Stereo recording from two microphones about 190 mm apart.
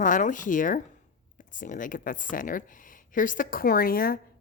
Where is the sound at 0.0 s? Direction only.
45° left (ahead or behind).